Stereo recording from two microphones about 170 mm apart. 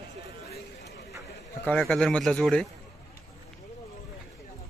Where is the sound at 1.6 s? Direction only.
5° left (ahead or behind).